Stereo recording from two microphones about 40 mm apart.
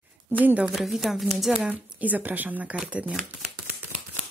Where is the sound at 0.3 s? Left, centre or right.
Right.